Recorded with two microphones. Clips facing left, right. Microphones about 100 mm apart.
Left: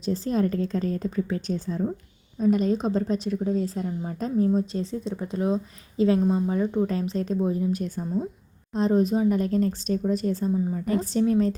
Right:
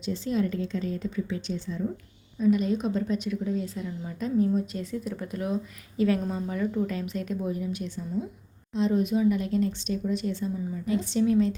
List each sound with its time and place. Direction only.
0.0 s a woman's voice: 40° left (ahead or behind)